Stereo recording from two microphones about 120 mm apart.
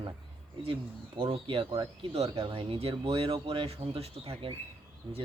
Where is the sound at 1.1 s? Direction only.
45° right (ahead or behind).